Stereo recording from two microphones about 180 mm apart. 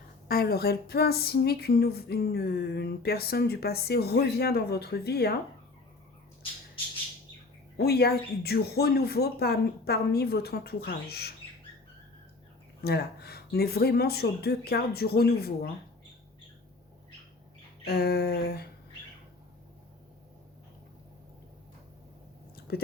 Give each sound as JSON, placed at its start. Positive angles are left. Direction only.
{"t": 0.3, "sound": "speech", "side_deg": 60}
{"t": 7.8, "sound": "speech", "side_deg": 60}
{"t": 12.8, "sound": "speech", "side_deg": 65}
{"t": 17.8, "sound": "speech", "side_deg": 60}
{"t": 22.5, "sound": "a sound", "side_deg": 60}